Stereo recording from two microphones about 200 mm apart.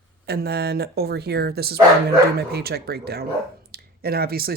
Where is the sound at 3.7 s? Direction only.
50° right (ahead or behind).